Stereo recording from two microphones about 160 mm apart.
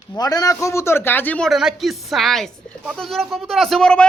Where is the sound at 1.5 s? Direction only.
Centre (ahead or behind).